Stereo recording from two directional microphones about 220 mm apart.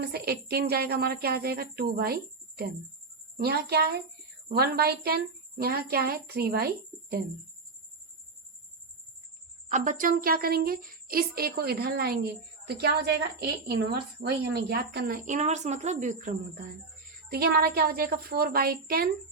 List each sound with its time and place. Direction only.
0.0 s a woman's voice: 45° right (ahead or behind)
3.3 s a woman's voice: 45° right (ahead or behind)
9.6 s a woman's voice: 35° right (ahead or behind)